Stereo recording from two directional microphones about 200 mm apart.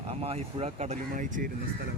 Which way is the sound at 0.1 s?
30° right (ahead or behind).